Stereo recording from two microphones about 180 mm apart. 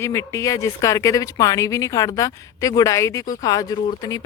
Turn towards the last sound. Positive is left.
turn(degrees=20)  # may be behind; listen again after turning